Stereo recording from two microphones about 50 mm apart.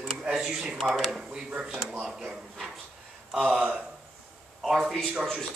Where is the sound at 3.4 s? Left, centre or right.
Centre.